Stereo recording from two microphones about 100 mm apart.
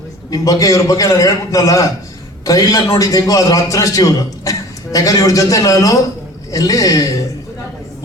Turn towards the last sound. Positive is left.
turn(degrees=35)  # may be behind; listen again after turning